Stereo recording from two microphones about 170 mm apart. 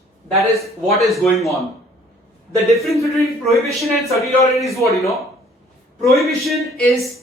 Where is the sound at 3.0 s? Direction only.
15° left (ahead or behind).